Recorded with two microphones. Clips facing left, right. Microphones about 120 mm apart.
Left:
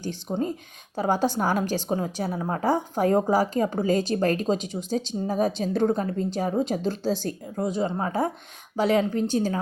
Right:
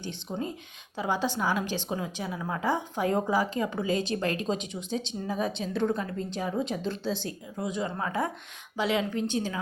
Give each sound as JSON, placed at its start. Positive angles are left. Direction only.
{"t": 0.0, "sound": "a woman's voice", "side_deg": 40}
{"t": 8.7, "sound": "a woman's voice", "side_deg": 40}